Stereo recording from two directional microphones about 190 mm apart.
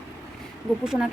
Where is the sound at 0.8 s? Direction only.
5° right (ahead or behind).